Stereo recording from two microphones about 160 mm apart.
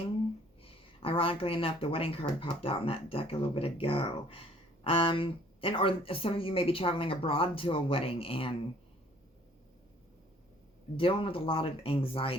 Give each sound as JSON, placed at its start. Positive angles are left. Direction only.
{"t": 0.6, "sound": "speech", "side_deg": 35}
{"t": 10.9, "sound": "speech", "side_deg": 35}